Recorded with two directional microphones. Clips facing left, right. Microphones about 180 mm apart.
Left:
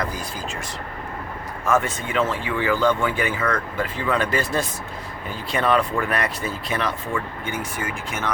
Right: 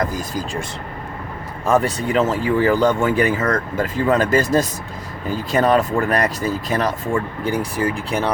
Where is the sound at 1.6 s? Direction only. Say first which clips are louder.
Right 4 dB; 35° right (ahead or behind).